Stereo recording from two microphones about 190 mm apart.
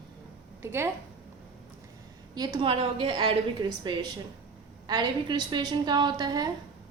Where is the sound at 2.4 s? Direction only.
20° right (ahead or behind).